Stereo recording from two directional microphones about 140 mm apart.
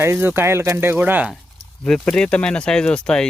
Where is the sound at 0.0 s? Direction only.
20° right (ahead or behind).